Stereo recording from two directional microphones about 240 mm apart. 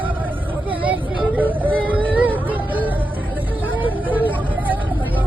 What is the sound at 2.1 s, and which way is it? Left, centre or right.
Music, centre.